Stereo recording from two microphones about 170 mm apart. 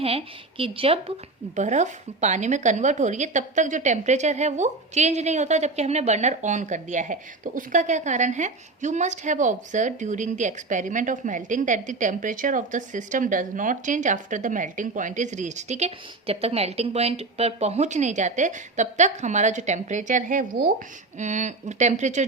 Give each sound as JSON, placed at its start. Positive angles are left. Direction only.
{"t": 0.0, "sound": "a woman's voice", "side_deg": -35}
{"t": 1.5, "sound": "a woman's voice", "side_deg": -45}